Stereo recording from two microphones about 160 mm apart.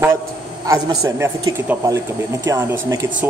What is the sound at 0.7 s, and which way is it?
A man's voice, 20° right (ahead or behind).